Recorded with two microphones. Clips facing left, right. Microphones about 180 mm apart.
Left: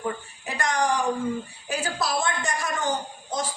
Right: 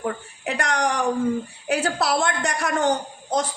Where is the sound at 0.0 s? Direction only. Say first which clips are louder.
Right 3 dB; 70° right (ahead or behind).